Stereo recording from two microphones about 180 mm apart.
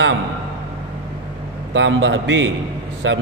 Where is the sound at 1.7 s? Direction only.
90° right.